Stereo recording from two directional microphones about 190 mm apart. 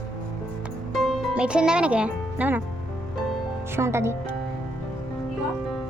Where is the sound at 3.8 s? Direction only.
15° right (ahead or behind).